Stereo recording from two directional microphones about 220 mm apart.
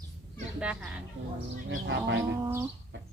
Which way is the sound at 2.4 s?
10° right (ahead or behind).